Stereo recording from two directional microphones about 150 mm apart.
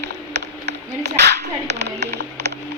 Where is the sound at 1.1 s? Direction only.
90° right.